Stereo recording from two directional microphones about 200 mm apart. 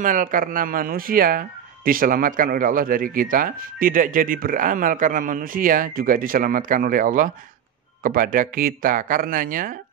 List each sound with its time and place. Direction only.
0.0 s speech: 40° right (ahead or behind)